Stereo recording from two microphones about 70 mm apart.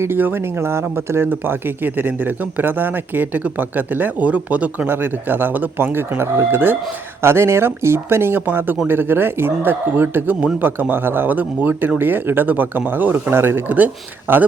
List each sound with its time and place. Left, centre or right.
0.0 s speech: right
13.7 s speech: right